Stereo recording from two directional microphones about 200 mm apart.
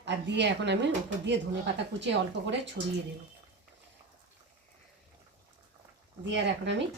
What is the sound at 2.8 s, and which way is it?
Speech, 60° right (ahead or behind).